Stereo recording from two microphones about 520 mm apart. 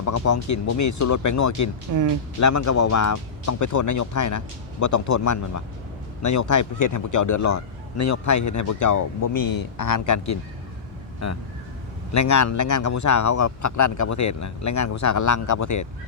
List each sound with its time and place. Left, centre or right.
0.0 s a man's voice: left